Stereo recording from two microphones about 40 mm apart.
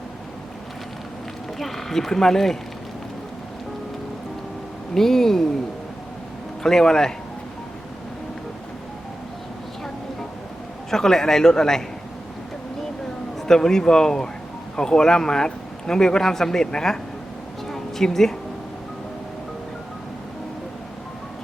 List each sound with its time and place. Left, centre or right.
1.5 s a man's voice: centre
4.9 s a man's voice: centre
6.6 s a man's voice: centre
10.9 s a man's voice: centre
13.5 s a man's voice: centre
17.7 s a sound: centre